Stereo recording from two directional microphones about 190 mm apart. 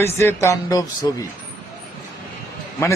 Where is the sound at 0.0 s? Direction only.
15° left (ahead or behind).